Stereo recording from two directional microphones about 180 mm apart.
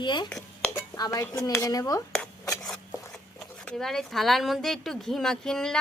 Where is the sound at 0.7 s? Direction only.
20° left (ahead or behind).